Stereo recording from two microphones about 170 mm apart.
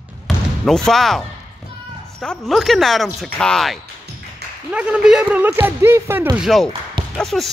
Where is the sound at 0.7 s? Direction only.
5° left (ahead or behind).